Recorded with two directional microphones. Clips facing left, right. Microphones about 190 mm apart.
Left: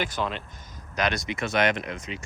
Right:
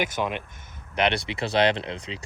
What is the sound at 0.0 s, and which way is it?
Speech, 15° right (ahead or behind).